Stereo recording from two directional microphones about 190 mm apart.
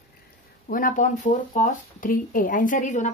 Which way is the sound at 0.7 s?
45° left (ahead or behind).